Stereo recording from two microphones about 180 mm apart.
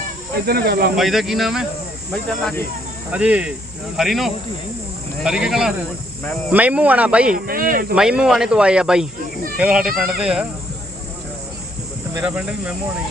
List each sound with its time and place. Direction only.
0.4 s speech: 60° right (ahead or behind)
0.9 s speech: centre (ahead or behind)
3.1 s speech: 5° right (ahead or behind)
7.3 s speech: 55° right (ahead or behind)
7.9 s speech: 5° right (ahead or behind)
12.1 s speech: 5° right (ahead or behind)